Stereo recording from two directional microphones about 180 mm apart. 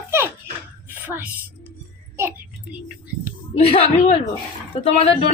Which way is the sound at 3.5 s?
35° left (ahead or behind).